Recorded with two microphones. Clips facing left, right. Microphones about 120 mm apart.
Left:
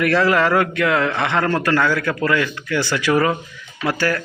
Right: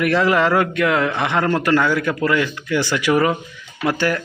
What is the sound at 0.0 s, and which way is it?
A man's voice, 15° right (ahead or behind).